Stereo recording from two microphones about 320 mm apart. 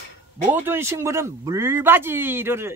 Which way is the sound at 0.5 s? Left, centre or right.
Centre.